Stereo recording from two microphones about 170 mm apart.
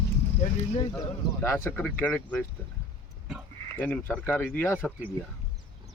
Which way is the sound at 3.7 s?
10° left (ahead or behind).